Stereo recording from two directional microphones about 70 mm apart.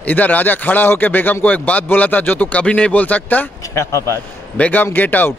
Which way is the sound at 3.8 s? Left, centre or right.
Left.